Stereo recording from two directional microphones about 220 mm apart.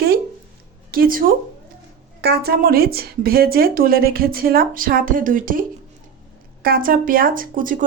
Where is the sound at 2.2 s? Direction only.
45° right (ahead or behind).